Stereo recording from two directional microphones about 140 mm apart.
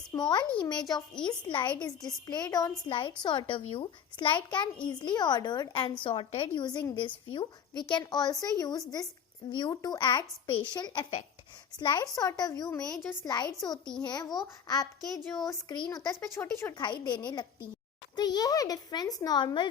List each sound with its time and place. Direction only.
0.1 s a child's voice: 30° left (ahead or behind)
16.8 s a woman's voice: 30° left (ahead or behind)